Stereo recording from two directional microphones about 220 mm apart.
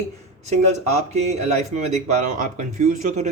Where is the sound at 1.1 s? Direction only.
30° right (ahead or behind).